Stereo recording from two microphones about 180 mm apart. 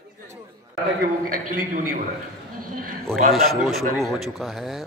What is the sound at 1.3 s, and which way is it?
Speech, 50° right (ahead or behind).